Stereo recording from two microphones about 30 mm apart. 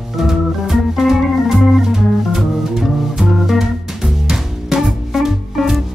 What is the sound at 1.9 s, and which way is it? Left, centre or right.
Music, right.